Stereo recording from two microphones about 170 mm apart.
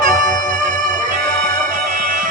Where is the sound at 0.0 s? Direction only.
50° right (ahead or behind).